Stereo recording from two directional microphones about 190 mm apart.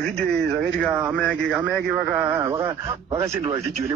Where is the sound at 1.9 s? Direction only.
10° right (ahead or behind).